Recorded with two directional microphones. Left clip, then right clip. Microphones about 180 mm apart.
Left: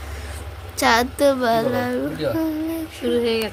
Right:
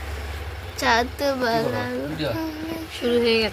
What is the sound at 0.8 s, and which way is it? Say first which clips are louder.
Speech: left 4 dB; 65° left (ahead or behind).